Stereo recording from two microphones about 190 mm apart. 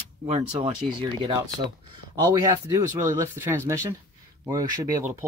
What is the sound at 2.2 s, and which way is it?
Speech, 20° right (ahead or behind).